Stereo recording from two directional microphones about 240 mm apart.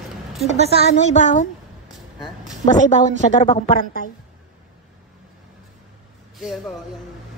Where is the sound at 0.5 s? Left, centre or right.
Right.